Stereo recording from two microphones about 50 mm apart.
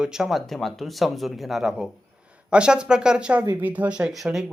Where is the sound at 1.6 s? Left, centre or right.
Centre.